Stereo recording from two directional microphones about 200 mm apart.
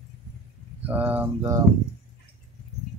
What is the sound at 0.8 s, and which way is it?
Speech, 10° right (ahead or behind).